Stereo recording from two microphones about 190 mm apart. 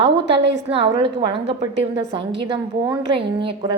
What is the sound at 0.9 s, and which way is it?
Speech, 25° right (ahead or behind).